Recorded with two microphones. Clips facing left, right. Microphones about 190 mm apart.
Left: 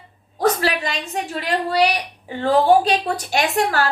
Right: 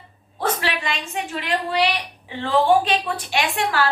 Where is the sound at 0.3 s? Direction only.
40° left (ahead or behind).